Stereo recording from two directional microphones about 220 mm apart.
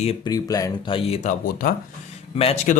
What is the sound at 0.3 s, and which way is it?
Speech, 15° left (ahead or behind).